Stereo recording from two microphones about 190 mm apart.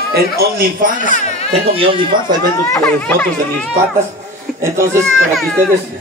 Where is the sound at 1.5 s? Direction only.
30° right (ahead or behind).